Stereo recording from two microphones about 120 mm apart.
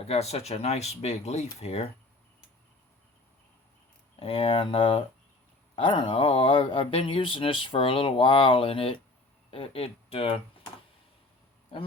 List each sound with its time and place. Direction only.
0.0 s speech: 60° left (ahead or behind)
4.2 s speech: 55° left (ahead or behind)